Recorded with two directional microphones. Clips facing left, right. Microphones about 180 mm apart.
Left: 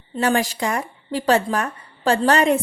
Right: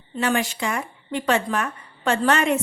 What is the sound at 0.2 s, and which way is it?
A woman's voice, 40° left (ahead or behind).